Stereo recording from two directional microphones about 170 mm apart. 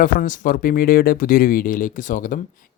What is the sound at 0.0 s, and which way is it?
Speech, 50° left (ahead or behind).